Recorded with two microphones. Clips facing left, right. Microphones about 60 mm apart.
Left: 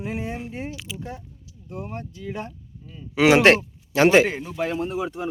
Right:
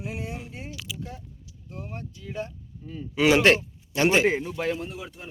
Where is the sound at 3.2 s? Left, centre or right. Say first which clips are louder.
Left 4 dB; left.